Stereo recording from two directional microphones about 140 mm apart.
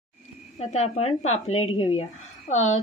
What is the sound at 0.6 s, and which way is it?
A woman's voice, 55° left (ahead or behind).